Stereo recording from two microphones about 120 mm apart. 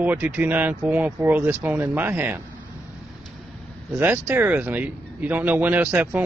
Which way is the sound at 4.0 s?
15° right (ahead or behind).